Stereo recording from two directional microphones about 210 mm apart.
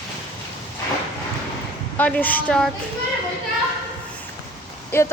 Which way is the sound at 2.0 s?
10° left (ahead or behind).